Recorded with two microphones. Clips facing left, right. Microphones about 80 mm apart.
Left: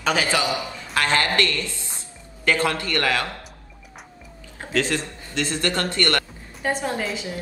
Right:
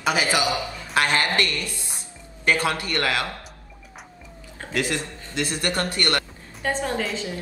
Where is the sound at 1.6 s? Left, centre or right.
Left.